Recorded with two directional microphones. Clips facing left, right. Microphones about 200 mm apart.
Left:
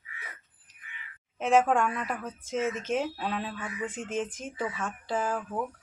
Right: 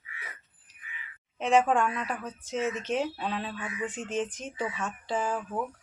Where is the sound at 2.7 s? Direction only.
45° left (ahead or behind).